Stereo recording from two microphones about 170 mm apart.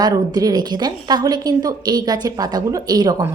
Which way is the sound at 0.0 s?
25° right (ahead or behind).